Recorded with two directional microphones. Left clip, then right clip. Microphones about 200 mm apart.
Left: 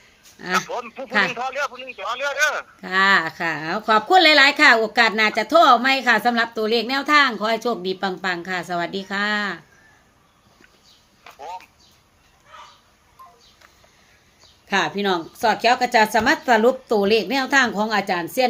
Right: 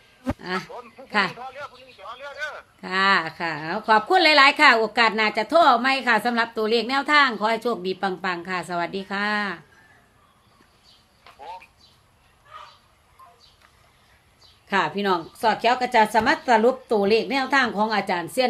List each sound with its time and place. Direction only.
0.3 s speech: 10° left (ahead or behind)
0.7 s a man's voice: 35° left (ahead or behind)
2.8 s a woman's voice: 5° left (ahead or behind)
11.3 s a sound: 25° left (ahead or behind)
14.7 s speech: 5° left (ahead or behind)